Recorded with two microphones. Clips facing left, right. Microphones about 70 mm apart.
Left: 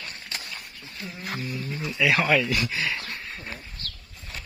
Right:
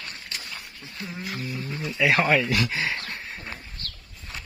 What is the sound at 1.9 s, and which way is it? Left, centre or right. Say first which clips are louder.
Speech: right 1 dB; right.